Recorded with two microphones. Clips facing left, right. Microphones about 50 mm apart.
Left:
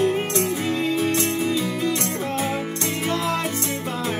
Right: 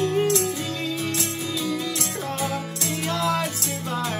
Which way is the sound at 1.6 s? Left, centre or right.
Left.